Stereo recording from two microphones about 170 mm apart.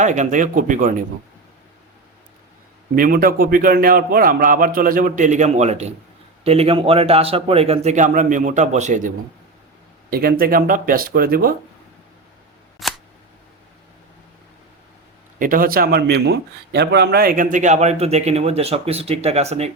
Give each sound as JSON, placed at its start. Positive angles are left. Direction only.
{"t": 0.0, "sound": "speech", "side_deg": -45}
{"t": 2.9, "sound": "a man's voice", "side_deg": -60}
{"t": 10.1, "sound": "a man's voice", "side_deg": -60}
{"t": 12.8, "sound": "a sound", "side_deg": 0}
{"t": 15.4, "sound": "speech", "side_deg": -55}